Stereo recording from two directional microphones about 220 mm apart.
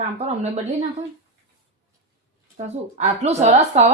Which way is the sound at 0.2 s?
30° right (ahead or behind).